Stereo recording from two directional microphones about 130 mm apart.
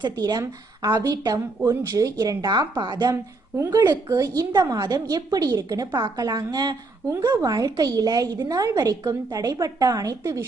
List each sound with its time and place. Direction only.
0.0 s a woman's voice: 30° right (ahead or behind)